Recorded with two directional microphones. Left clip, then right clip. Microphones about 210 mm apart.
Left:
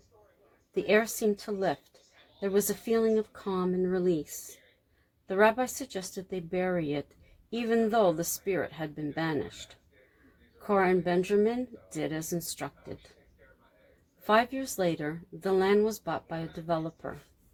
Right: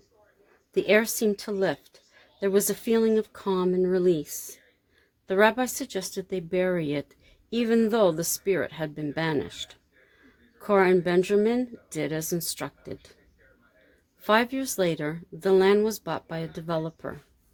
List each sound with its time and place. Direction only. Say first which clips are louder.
0.7 s speech: right 4 dB; 40° right (ahead or behind)
5.3 s speech: right 3 dB; 40° right (ahead or behind)
10.6 s speech: right 5 dB; 40° right (ahead or behind)
14.3 s speech: right 3 dB; 40° right (ahead or behind)